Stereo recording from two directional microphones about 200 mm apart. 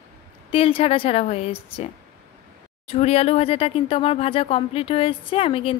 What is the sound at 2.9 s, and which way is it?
Speech, 30° left (ahead or behind).